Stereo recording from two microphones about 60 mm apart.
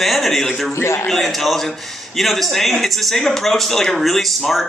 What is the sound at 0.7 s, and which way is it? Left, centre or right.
Speech, left.